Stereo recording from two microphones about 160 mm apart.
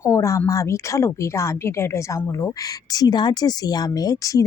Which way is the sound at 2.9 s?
25° left (ahead or behind).